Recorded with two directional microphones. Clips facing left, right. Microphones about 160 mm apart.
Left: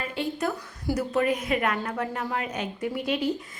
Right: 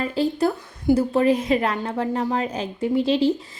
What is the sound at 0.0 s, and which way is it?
A woman's voice, 35° right (ahead or behind).